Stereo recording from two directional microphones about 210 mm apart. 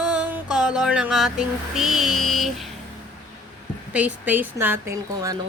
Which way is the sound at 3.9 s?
5° right (ahead or behind).